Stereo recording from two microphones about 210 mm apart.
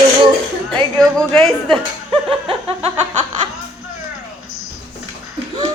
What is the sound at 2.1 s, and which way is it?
Speech, 25° right (ahead or behind).